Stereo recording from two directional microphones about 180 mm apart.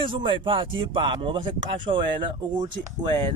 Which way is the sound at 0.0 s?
30° right (ahead or behind).